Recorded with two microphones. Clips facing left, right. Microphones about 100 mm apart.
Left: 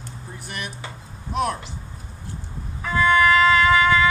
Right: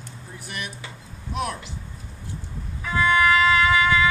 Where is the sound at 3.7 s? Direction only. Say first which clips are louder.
Left 2 dB; 45° left (ahead or behind).